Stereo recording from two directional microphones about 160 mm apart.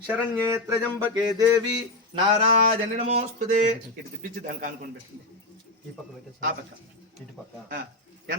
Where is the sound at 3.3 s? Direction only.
55° right (ahead or behind).